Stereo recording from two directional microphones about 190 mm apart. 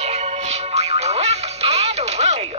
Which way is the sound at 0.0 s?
35° right (ahead or behind).